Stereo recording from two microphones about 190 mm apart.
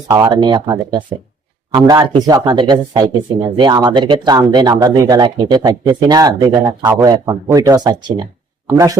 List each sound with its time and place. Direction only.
0.1 s speech: 20° right (ahead or behind)